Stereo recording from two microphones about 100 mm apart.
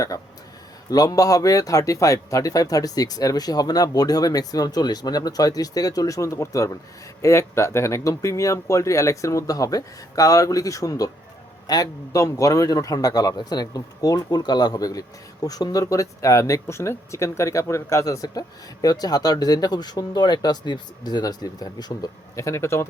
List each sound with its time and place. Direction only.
0.9 s a man's voice: 40° left (ahead or behind)
22.4 s speech: 30° left (ahead or behind)